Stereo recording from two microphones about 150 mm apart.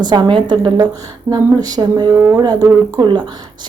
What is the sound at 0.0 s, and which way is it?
Speech, 30° right (ahead or behind).